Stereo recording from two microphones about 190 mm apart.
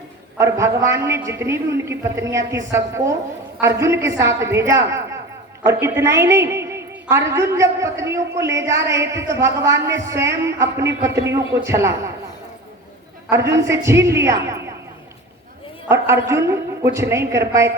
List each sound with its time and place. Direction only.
0.3 s a woman's voice: 15° right (ahead or behind)
13.3 s a woman's voice: 15° right (ahead or behind)
15.9 s a woman's voice: 15° right (ahead or behind)